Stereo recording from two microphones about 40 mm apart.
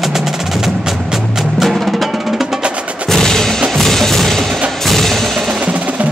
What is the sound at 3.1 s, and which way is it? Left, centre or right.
Music, centre.